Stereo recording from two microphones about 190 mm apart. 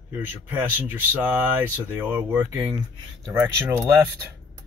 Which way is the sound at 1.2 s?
10° right (ahead or behind).